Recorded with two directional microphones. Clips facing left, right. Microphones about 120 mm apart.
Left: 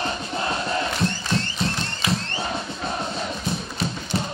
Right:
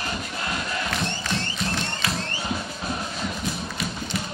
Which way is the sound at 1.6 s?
30° left (ahead or behind).